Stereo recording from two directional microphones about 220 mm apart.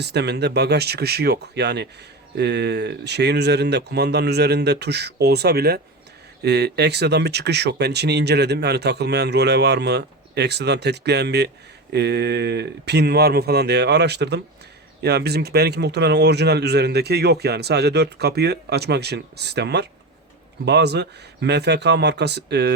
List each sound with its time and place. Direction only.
0.0 s speech: 50° right (ahead or behind)